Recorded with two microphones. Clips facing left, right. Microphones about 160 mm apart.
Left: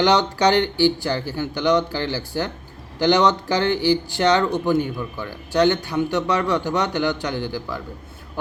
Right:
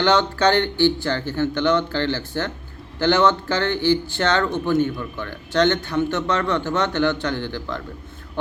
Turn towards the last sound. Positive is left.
turn(degrees=10)  # may be behind; listen again after turning